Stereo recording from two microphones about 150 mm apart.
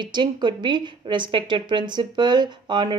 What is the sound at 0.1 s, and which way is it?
A woman's voice, 30° right (ahead or behind).